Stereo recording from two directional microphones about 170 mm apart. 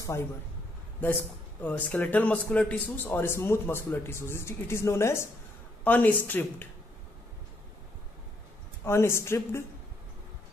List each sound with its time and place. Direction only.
1.6 s a man's voice: 10° left (ahead or behind)
8.8 s a man's voice: 15° left (ahead or behind)